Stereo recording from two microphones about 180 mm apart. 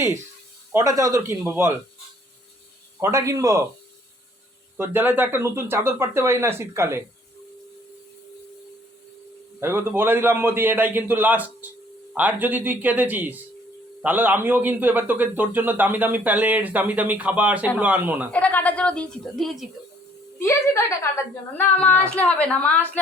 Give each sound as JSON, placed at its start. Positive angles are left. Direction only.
{"t": 0.7, "sound": "a man's voice", "side_deg": -15}
{"t": 3.0, "sound": "a man's voice", "side_deg": -15}
{"t": 4.8, "sound": "a man's voice", "side_deg": -10}
{"t": 9.6, "sound": "a man's voice", "side_deg": -15}
{"t": 18.3, "sound": "a woman's voice", "side_deg": 5}
{"t": 20.4, "sound": "a woman's voice", "side_deg": 15}